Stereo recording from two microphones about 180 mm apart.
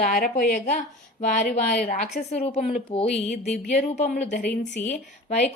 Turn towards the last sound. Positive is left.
turn(degrees=40)  # may be behind; listen again after turning